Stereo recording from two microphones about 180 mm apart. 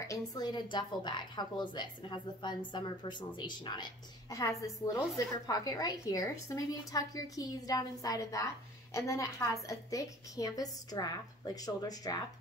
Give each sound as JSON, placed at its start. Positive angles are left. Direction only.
{"t": 0.0, "sound": "a woman's voice", "side_deg": 20}